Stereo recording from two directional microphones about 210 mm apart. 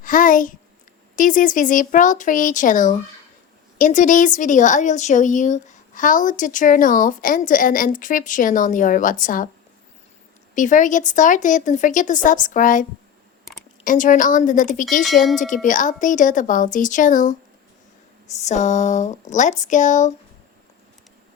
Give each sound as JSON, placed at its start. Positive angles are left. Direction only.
{"t": 0.0, "sound": "a child's voice", "side_deg": 40}
{"t": 10.5, "sound": "a woman's voice", "side_deg": 35}
{"t": 13.8, "sound": "a woman's voice", "side_deg": 40}
{"t": 18.4, "sound": "a woman's voice", "side_deg": 35}